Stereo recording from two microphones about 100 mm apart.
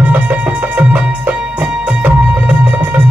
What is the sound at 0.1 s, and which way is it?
Music, 15° right (ahead or behind).